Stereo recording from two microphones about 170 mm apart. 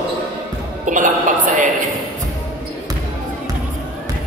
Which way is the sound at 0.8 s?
50° right (ahead or behind).